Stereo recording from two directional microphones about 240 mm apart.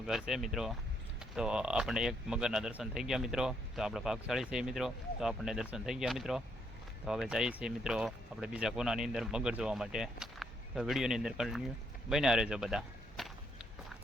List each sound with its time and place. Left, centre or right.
0.0 s speech: centre